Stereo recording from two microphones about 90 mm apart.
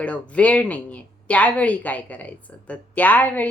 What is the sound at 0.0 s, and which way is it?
Speech, 15° left (ahead or behind).